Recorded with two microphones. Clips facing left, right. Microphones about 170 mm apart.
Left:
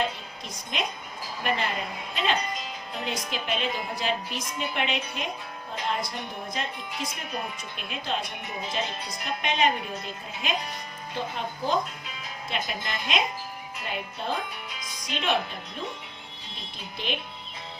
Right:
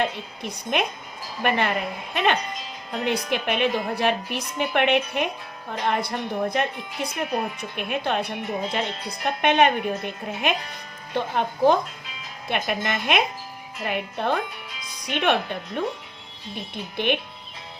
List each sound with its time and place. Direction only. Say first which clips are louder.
0.0 s a woman's voice: right 4 dB; 65° right (ahead or behind)